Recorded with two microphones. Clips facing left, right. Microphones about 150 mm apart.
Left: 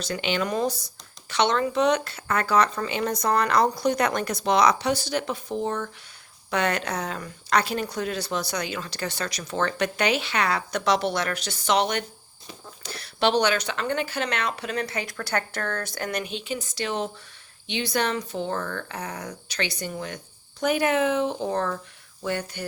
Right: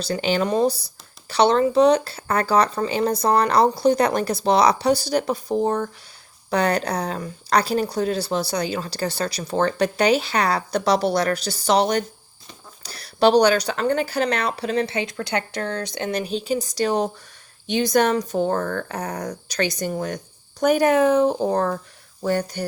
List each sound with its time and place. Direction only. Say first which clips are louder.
0.0 s speech: right 5 dB; 35° right (ahead or behind)